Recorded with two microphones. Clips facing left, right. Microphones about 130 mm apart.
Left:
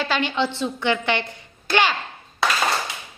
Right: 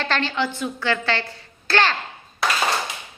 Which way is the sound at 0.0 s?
10° left (ahead or behind).